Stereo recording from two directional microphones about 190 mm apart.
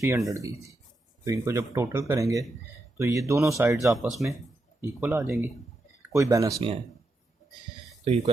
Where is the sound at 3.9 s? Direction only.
Centre (ahead or behind); by 6.5 s 15° right (ahead or behind).